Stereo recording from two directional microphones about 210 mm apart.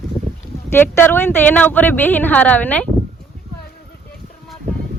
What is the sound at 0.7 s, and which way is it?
Speech, 10° left (ahead or behind).